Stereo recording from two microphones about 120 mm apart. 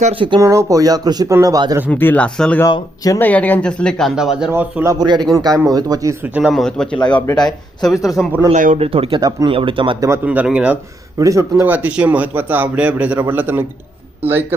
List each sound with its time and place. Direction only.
0.1 s speech: 45° right (ahead or behind)
0.3 s speech: 30° right (ahead or behind)
1.9 s speech: 15° left (ahead or behind)
2.6 s speech: 30° left (ahead or behind)
3.2 s speech: 15° left (ahead or behind)
4.1 s speech: 5° right (ahead or behind)
4.5 s speech: 20° right (ahead or behind)
4.9 s speech: 35° right (ahead or behind)
6.2 s a man's voice: 15° right (ahead or behind)
6.5 s speech: 5° left (ahead or behind)
8.8 s speech: 50° right (ahead or behind)
10.2 s a man's voice: 10° right (ahead or behind)
11.2 s speech: 25° right (ahead or behind)
11.7 s a man's voice: 10° right (ahead or behind)